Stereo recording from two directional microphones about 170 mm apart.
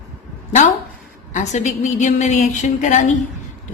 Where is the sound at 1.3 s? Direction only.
45° left (ahead or behind).